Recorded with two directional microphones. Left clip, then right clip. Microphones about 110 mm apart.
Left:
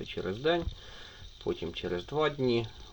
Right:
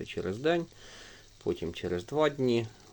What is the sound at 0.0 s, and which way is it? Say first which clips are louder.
Speech: even; 30° right (ahead or behind).